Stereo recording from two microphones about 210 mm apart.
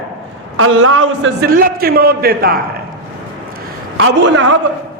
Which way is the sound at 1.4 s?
45° right (ahead or behind).